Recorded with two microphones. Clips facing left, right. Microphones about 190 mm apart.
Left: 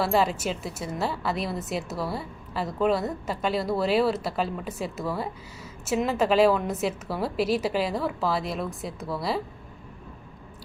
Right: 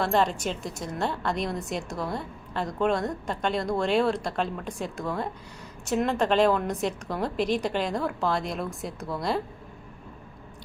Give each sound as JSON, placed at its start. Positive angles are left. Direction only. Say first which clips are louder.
{"t": 0.0, "sound": "a woman's voice", "louder": "left 1 dB", "side_deg": 5}